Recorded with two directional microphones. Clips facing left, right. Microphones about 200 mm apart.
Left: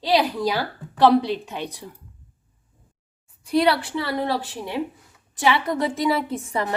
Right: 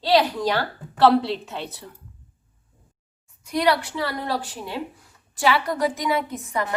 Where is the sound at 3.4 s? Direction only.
30° left (ahead or behind).